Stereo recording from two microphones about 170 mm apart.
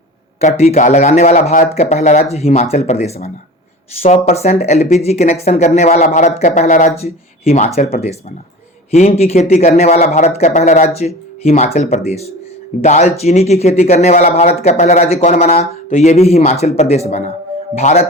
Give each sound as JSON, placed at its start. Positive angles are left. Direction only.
{"t": 0.3, "sound": "speech", "side_deg": 40}
{"t": 8.9, "sound": "speech", "side_deg": 40}